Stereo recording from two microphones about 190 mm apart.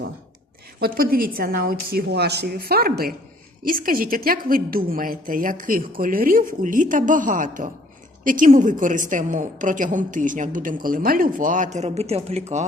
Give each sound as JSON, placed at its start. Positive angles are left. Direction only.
{"t": 0.8, "sound": "a woman's voice", "side_deg": -50}